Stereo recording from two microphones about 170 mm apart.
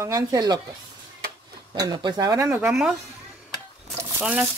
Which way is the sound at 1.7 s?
25° right (ahead or behind).